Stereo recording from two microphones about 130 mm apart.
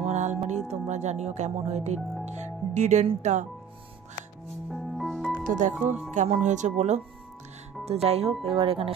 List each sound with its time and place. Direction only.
0.0 s music: 65° right (ahead or behind)
0.7 s speech: 60° right (ahead or behind)
4.6 s music: centre (ahead or behind)
5.5 s speech: 75° right (ahead or behind)
6.1 s speech: 60° right (ahead or behind)
7.8 s speech: 50° right (ahead or behind)